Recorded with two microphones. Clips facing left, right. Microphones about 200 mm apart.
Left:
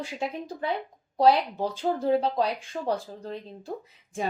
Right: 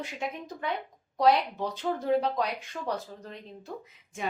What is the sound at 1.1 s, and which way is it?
A woman's voice, 30° left (ahead or behind).